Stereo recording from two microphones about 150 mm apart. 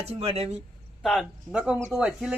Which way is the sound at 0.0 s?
40° right (ahead or behind).